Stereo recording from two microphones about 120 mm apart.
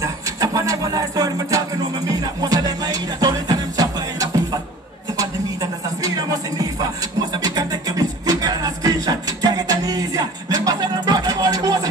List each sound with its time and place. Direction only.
0.0 s a sound: 30° right (ahead or behind)
2.0 s music: 30° right (ahead or behind)
7.4 s music: 30° right (ahead or behind)